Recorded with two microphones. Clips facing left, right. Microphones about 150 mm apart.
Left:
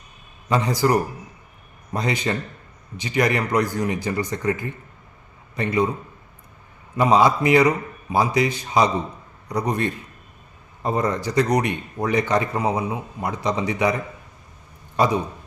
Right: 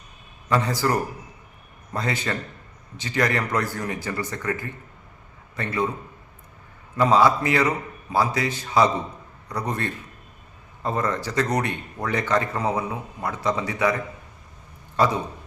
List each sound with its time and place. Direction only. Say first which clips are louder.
0.5 s a man's voice: left 3 dB; 15° left (ahead or behind)
6.9 s a man's voice: left 1 dB; 15° left (ahead or behind)